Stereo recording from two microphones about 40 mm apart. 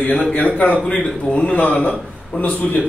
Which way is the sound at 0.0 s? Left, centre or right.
Left.